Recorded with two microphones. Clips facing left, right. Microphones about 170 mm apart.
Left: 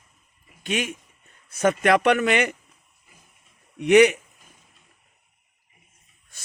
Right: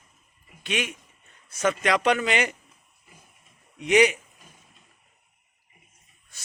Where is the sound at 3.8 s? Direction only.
60° left (ahead or behind).